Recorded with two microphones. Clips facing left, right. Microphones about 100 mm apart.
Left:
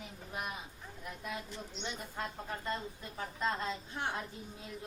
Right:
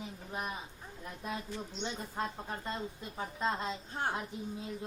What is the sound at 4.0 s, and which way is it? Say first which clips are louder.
Speech: right 3 dB; 40° right (ahead or behind).